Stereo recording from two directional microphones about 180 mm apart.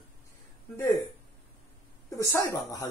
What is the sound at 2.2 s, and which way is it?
Speech, 15° left (ahead or behind).